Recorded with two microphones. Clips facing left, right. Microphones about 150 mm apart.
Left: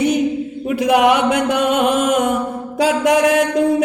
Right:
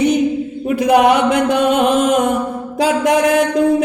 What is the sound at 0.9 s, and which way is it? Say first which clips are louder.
Mantra: right 2 dB; 40° right (ahead or behind).